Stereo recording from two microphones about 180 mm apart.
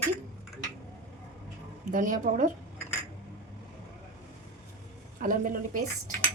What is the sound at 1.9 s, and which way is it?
Speech, 45° right (ahead or behind).